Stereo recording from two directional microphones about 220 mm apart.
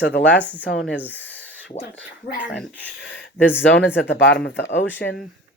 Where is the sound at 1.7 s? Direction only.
30° left (ahead or behind).